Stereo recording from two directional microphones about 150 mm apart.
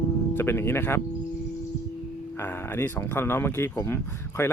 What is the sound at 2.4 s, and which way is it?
Speech, 15° left (ahead or behind).